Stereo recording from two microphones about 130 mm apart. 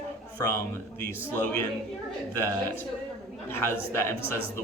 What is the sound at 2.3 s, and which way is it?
A man's voice, 15° left (ahead or behind).